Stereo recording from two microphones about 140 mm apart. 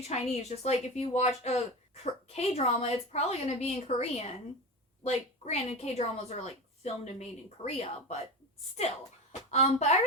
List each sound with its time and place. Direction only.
0.0 s a woman's voice: 50° left (ahead or behind)
9.5 s a woman's voice: 50° left (ahead or behind)